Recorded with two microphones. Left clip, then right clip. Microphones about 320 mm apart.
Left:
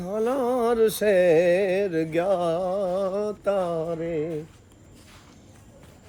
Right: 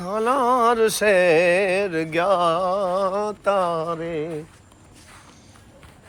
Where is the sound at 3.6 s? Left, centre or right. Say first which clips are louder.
Right 4 dB; centre.